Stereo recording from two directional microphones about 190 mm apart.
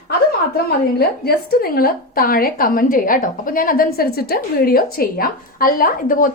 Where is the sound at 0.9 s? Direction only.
55° left (ahead or behind).